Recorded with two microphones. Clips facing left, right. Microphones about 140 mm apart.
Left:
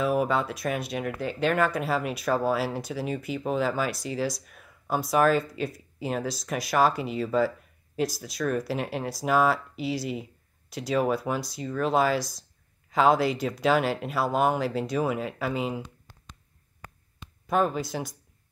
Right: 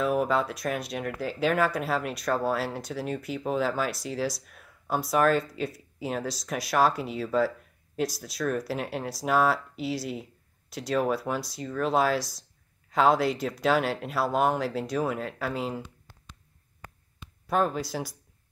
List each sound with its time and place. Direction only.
0.0 s speech: centre (ahead or behind)
15.8 s a sound: 20° left (ahead or behind)
17.5 s speech: centre (ahead or behind)